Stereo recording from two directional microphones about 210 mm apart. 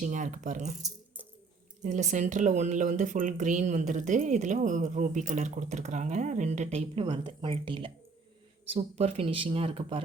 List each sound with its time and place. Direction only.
0.0 s speech: 35° right (ahead or behind)
0.8 s rattle: 15° right (ahead or behind)
1.8 s speech: 35° right (ahead or behind)